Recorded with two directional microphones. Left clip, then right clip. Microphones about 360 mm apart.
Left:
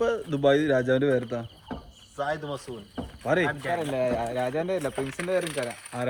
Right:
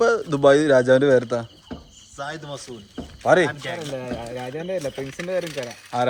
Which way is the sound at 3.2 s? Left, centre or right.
Centre.